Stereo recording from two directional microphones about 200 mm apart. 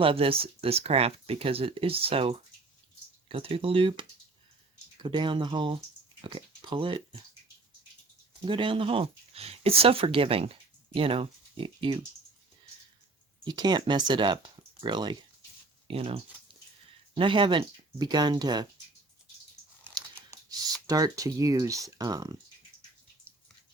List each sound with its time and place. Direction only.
0.0 s speech: 25° right (ahead or behind)
5.0 s speech: 25° right (ahead or behind)
8.4 s speech: 25° right (ahead or behind)
13.4 s speech: 20° right (ahead or behind)
20.8 s speech: 15° right (ahead or behind)